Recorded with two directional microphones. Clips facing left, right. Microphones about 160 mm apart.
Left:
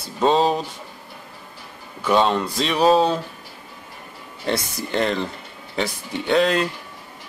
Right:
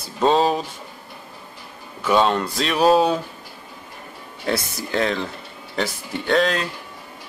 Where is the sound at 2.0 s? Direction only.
Centre (ahead or behind).